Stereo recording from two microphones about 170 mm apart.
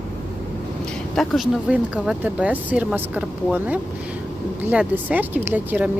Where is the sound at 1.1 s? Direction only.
Centre (ahead or behind).